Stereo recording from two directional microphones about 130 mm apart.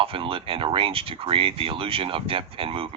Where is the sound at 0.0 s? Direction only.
45° right (ahead or behind).